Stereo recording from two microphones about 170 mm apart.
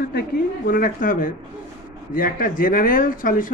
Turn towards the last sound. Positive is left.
turn(degrees=55)  # may be behind; listen again after turning